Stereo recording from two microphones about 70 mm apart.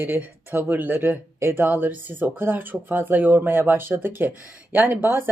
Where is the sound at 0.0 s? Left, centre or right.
Right.